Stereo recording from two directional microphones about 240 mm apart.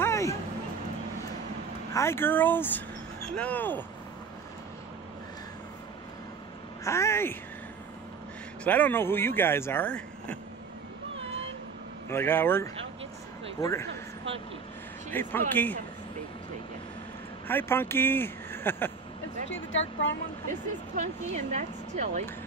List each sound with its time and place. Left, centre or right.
0.0 s a sound: centre
2.0 s speech: centre
6.8 s speech: centre
8.6 s speech: centre
12.1 s speech: centre
15.0 s speech: centre
17.5 s speech: centre
19.5 s speech: left
20.9 s speech: right